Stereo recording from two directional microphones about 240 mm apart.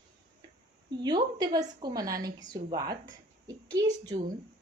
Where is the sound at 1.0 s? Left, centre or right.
Centre.